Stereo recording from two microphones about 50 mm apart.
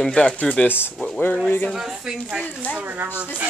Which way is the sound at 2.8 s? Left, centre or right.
Right.